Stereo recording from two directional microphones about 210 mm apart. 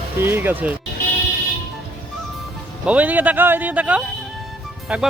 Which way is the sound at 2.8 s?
5° right (ahead or behind).